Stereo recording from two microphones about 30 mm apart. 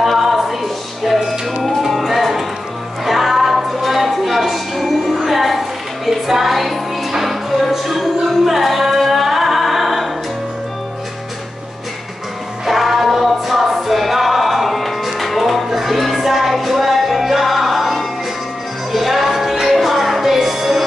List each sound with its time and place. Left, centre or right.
0.0 s music: centre
7.6 s a capella: centre
12.6 s music: centre